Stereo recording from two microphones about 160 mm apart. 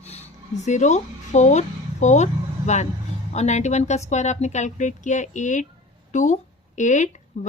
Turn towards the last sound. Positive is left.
turn(degrees=45)  # may be behind; listen again after turning